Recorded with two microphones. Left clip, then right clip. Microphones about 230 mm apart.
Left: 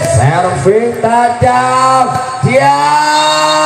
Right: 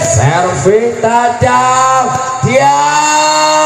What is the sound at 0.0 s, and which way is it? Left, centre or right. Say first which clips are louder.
Music: even; right.